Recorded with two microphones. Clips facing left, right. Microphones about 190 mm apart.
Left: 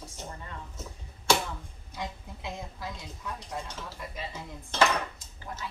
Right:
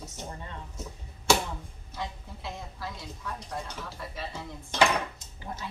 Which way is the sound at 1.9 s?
15° left (ahead or behind).